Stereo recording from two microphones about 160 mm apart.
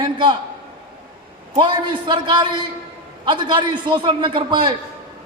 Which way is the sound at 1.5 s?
30° right (ahead or behind).